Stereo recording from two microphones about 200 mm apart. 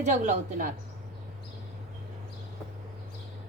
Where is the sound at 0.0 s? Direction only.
35° right (ahead or behind).